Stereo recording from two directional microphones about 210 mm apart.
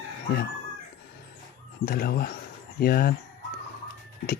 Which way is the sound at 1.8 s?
45° left (ahead or behind).